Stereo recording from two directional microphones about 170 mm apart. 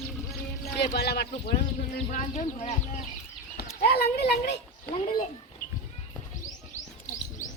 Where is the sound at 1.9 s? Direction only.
40° left (ahead or behind).